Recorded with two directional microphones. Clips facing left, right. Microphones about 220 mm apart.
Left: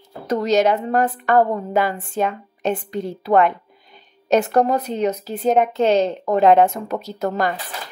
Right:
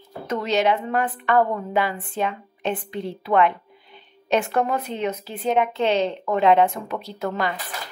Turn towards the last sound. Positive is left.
turn(degrees=40)  # may be behind; listen again after turning